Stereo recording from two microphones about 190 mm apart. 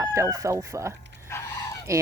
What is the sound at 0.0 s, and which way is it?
Speech, 15° right (ahead or behind).